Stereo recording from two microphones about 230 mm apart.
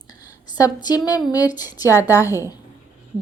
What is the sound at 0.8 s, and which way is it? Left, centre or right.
A woman's voice, centre.